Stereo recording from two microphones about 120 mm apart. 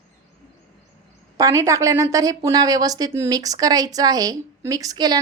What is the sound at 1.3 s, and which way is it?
A woman's voice, 25° right (ahead or behind).